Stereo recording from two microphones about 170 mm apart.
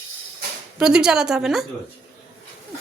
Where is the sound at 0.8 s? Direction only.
5° right (ahead or behind).